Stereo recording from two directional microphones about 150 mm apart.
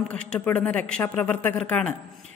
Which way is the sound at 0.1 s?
10° left (ahead or behind).